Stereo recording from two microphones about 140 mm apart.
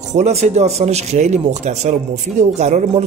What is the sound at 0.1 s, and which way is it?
Speech, 55° right (ahead or behind).